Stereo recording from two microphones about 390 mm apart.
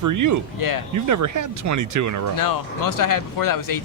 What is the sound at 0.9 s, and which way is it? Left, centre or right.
Speech, right.